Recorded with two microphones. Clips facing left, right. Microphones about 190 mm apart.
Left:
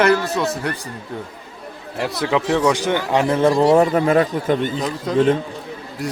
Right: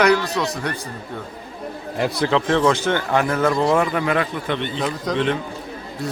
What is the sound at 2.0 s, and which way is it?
A man's voice, centre (ahead or behind).